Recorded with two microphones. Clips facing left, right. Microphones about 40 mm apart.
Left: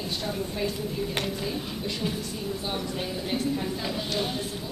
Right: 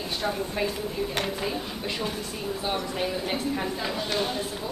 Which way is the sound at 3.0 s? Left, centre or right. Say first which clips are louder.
Right 1 dB; centre.